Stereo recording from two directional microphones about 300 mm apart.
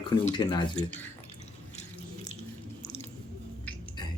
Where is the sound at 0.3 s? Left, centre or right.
Centre.